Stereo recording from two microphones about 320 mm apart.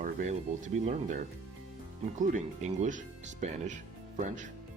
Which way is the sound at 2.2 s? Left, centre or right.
Right.